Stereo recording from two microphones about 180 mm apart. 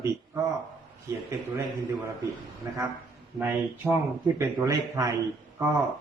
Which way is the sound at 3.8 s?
10° right (ahead or behind).